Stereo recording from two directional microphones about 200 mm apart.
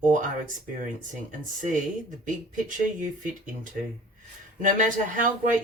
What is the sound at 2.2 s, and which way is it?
Speech, 40° right (ahead or behind).